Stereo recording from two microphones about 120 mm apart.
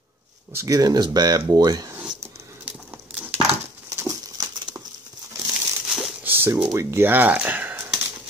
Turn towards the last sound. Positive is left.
turn(degrees=-15)  # may be behind; listen again after turning